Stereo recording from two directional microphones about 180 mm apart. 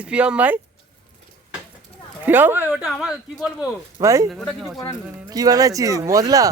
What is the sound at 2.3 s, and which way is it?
Speech, 10° right (ahead or behind).